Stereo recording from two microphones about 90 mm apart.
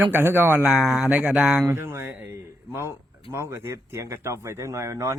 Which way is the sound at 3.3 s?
30° right (ahead or behind).